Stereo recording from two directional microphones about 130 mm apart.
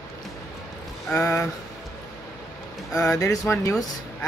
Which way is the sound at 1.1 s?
10° left (ahead or behind).